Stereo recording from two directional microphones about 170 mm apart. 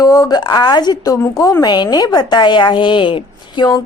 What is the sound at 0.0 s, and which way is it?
A woman's voice, 20° left (ahead or behind).